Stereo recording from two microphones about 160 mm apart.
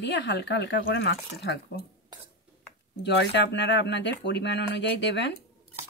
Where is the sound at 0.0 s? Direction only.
90° left.